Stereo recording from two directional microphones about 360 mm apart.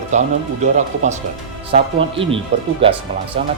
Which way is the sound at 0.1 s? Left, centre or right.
Centre.